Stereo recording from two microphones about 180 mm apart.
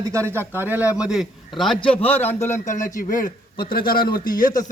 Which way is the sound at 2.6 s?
45° left (ahead or behind).